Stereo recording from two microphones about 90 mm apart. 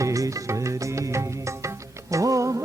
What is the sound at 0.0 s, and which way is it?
Music, 35° right (ahead or behind).